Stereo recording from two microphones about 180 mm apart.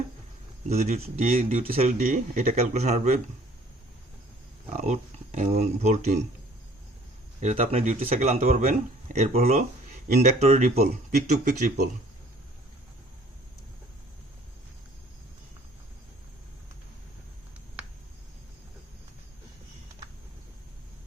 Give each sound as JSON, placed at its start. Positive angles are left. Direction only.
{"t": 0.7, "sound": "speech", "side_deg": -35}
{"t": 1.4, "sound": "speech", "side_deg": -50}
{"t": 1.6, "sound": "speech", "side_deg": -35}
{"t": 4.8, "sound": "speech", "side_deg": -40}
{"t": 7.4, "sound": "speech", "side_deg": -40}